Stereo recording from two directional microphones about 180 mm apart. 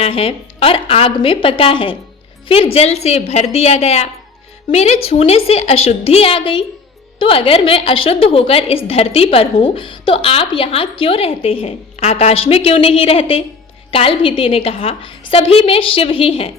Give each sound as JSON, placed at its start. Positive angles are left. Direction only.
{"t": 0.0, "sound": "a woman's voice", "side_deg": 35}